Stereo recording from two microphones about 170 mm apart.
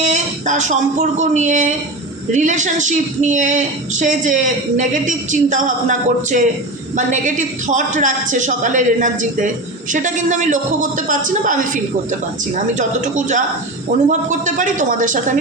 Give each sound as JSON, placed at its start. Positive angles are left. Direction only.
{"t": 0.0, "sound": "a woman's voice", "side_deg": -45}